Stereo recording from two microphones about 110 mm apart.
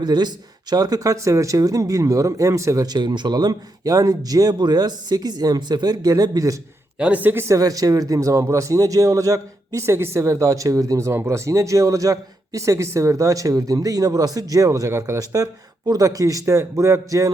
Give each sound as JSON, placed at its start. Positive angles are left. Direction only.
{"t": 0.0, "sound": "speech", "side_deg": -40}
{"t": 7.0, "sound": "speech", "side_deg": -15}